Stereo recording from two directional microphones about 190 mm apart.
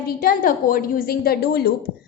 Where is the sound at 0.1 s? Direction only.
50° left (ahead or behind).